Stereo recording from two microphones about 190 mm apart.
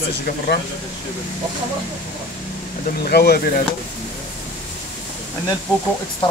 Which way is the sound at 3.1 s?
55° left (ahead or behind).